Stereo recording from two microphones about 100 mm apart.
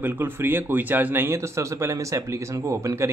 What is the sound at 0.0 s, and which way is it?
A man's voice, 20° right (ahead or behind).